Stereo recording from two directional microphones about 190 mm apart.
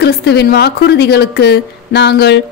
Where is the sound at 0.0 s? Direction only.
60° left (ahead or behind).